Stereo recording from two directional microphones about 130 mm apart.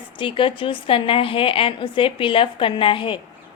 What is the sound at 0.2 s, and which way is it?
A woman's voice, 40° left (ahead or behind).